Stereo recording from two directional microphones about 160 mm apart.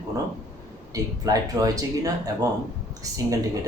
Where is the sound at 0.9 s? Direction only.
20° right (ahead or behind).